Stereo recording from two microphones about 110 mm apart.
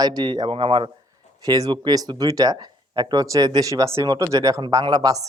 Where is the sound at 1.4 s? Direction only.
35° right (ahead or behind).